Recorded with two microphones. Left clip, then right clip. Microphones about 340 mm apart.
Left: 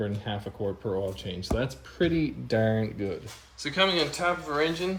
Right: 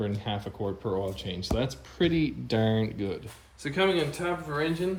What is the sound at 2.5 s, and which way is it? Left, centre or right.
Speech, centre.